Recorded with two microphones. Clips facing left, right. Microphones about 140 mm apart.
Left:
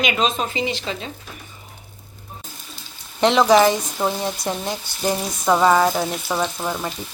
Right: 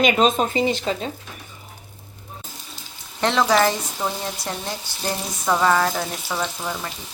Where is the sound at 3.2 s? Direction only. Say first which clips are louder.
Left 4 dB; 20° left (ahead or behind).